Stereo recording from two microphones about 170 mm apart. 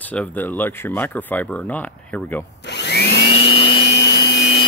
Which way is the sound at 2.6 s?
85° left.